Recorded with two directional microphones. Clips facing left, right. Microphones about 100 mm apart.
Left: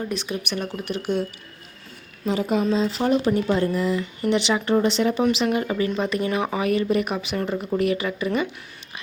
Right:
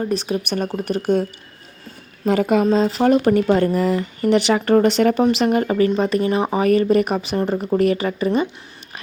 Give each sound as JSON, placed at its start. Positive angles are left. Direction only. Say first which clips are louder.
{"t": 0.0, "sound": "speech", "louder": "right 6 dB", "side_deg": -35}
{"t": 2.2, "sound": "a woman's voice", "louder": "right 6 dB", "side_deg": -60}
{"t": 2.6, "sound": "speech", "louder": "right 5 dB", "side_deg": -45}